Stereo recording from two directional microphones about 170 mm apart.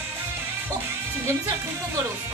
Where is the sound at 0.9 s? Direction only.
15° right (ahead or behind).